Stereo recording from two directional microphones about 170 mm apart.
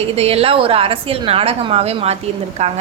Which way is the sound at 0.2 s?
35° right (ahead or behind).